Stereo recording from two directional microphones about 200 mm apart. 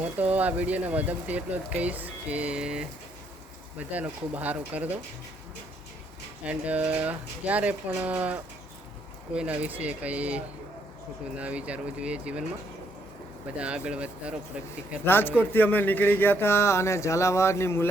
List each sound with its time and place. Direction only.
0.0 s speech: 10° right (ahead or behind)
6.4 s speech: 5° right (ahead or behind)
13.6 s speech: 5° right (ahead or behind)
15.0 s speech: 10° left (ahead or behind)